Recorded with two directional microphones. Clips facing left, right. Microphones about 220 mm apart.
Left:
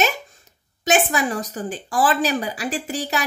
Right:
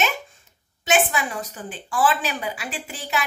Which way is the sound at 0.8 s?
40° left (ahead or behind).